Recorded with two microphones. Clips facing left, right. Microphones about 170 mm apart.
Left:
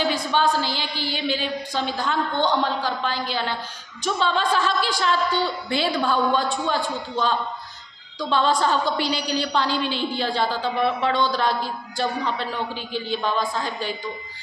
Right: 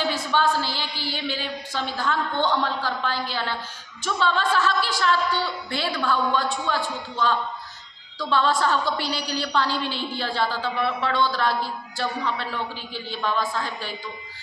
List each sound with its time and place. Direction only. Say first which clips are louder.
0.1 s a woman's voice: left 1 dB; 15° left (ahead or behind)